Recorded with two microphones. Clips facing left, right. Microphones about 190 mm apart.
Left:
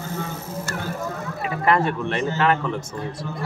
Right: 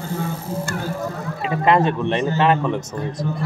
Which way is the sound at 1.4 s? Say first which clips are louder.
Right 4 dB; 20° right (ahead or behind).